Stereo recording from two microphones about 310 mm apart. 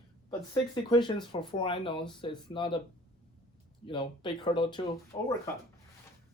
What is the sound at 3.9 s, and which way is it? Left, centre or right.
Speech, centre.